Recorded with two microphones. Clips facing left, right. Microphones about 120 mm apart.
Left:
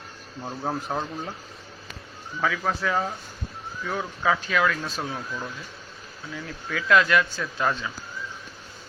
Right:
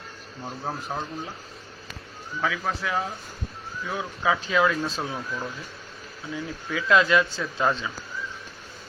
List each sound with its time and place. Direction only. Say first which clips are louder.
0.7 s speech: left 3 dB; 5° left (ahead or behind)
2.4 s speech: left 2 dB; 5° right (ahead or behind)
4.4 s a man's voice: right 2 dB; 25° right (ahead or behind)
4.9 s speech: right 1 dB; centre (ahead or behind)
6.3 s a man's voice: right 2 dB; 15° right (ahead or behind)